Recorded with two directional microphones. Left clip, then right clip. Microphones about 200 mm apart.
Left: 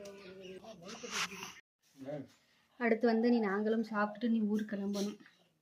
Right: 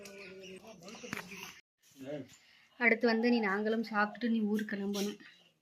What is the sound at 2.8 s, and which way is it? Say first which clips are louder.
A woman's voice: right 2 dB; 10° left (ahead or behind).